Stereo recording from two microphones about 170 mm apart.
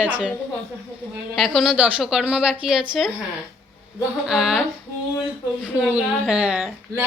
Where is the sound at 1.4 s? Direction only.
Centre (ahead or behind).